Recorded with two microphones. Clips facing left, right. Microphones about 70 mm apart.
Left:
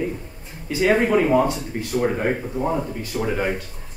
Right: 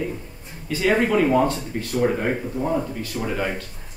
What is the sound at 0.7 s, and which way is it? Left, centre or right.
Speech, centre.